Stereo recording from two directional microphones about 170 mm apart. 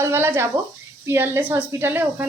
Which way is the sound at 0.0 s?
15° right (ahead or behind).